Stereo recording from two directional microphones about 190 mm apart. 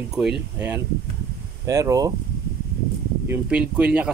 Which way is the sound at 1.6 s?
15° right (ahead or behind).